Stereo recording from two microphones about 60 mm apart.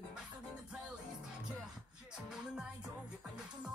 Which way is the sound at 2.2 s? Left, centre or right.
Centre.